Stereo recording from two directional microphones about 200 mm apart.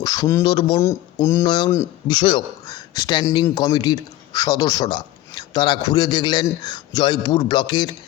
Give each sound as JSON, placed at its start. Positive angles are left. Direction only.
{"t": 0.0, "sound": "speech", "side_deg": 20}